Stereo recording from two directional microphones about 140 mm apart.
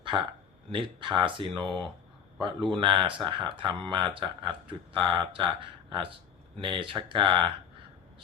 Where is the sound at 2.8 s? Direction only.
35° right (ahead or behind).